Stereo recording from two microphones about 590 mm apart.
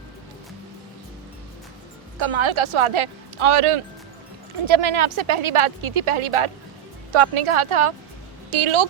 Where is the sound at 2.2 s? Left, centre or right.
Right.